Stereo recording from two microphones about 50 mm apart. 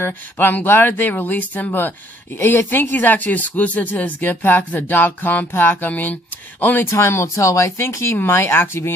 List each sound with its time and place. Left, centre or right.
0.0 s speech: left
6.9 s speech: left
7.9 s speech: left
8.3 s speech: left